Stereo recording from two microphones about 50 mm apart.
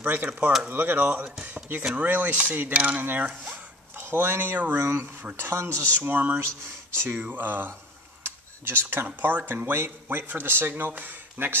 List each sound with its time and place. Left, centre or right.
0.0 s speech: right
2.0 s speech: right
4.6 s speech: right
5.4 s speech: right
6.0 s speech: right
6.9 s speech: right
7.2 s speech: right
8.2 s computer keyboard: right
9.0 s speech: right
11.4 s speech: right